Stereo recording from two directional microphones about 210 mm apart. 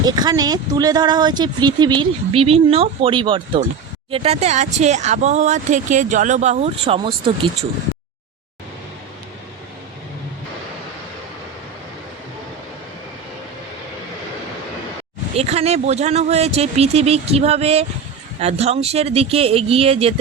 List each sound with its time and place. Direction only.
0.0 s speech: 20° right (ahead or behind)
15.4 s speech: 30° right (ahead or behind)